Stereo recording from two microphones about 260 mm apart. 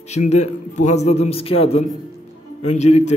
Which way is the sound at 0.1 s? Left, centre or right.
Left.